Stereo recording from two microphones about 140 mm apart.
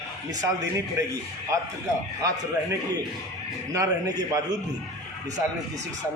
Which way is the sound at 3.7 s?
25° right (ahead or behind).